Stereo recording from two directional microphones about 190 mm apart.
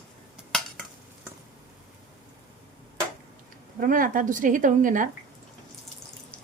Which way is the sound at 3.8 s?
45° right (ahead or behind).